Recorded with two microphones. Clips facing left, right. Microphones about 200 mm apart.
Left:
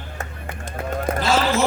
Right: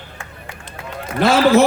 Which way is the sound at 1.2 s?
60° right (ahead or behind).